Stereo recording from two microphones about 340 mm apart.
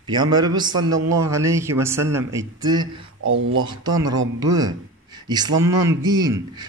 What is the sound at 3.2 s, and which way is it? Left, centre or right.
Speech, right.